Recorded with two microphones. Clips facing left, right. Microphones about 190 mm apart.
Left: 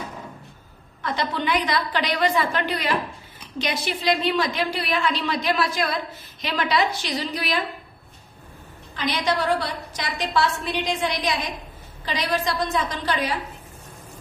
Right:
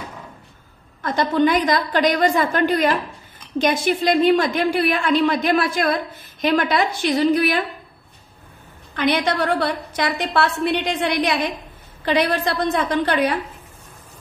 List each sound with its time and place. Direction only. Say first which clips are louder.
1.0 s a woman's voice: right 8 dB; 45° right (ahead or behind)
8.9 s a woman's voice: right 5 dB; 60° right (ahead or behind)